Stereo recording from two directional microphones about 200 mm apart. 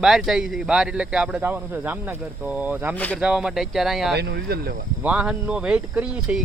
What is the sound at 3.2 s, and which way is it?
Speech, 5° right (ahead or behind).